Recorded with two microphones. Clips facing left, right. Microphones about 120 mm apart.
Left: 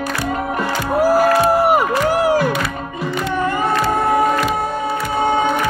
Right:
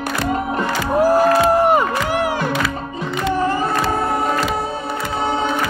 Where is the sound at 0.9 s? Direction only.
5° left (ahead or behind).